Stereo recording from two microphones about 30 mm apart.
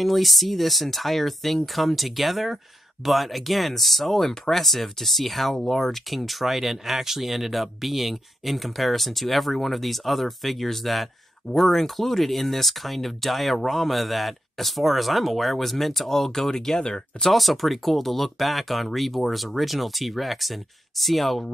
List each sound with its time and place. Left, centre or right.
0.0 s speech: centre
16.3 s speech: centre
17.3 s speech: centre